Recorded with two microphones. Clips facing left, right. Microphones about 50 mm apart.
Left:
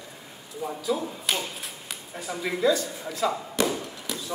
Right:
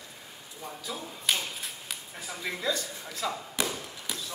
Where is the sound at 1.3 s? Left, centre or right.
Centre.